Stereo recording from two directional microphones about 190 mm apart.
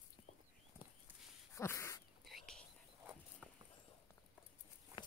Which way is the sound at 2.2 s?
Centre (ahead or behind).